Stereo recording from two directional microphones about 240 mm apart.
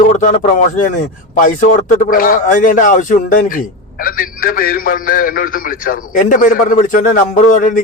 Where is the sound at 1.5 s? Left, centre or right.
Left.